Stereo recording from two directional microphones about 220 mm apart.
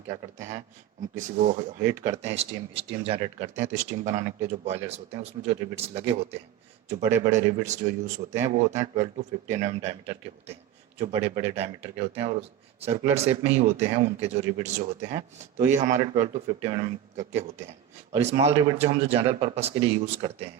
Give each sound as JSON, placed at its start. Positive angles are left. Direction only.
{"t": 0.1, "sound": "a man's voice", "side_deg": -35}